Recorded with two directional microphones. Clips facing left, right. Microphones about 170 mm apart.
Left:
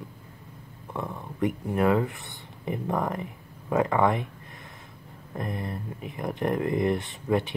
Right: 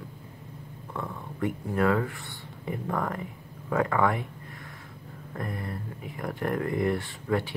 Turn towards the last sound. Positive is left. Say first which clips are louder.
# left 2 dB
turn(degrees=20)  # may be behind; listen again after turning